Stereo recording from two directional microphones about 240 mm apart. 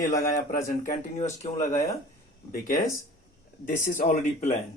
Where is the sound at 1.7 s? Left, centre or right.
Centre.